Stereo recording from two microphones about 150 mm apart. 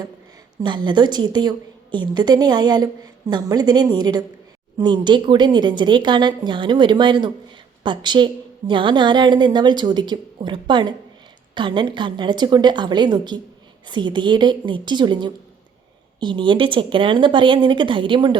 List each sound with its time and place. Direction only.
0.6 s a woman's voice: 30° right (ahead or behind)